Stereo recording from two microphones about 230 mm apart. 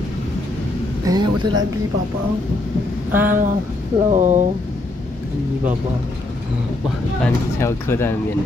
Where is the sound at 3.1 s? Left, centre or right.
Centre.